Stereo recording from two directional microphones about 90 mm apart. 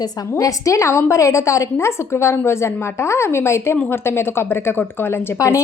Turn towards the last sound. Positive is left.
turn(degrees=35)  # may be behind; listen again after turning